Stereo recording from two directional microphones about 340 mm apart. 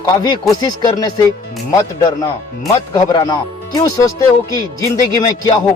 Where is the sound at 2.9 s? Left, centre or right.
Centre.